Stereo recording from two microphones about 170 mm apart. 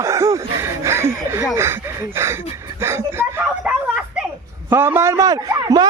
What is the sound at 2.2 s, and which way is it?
Speech, 15° right (ahead or behind).